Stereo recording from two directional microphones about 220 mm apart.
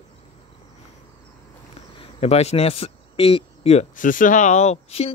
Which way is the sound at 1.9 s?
25° left (ahead or behind).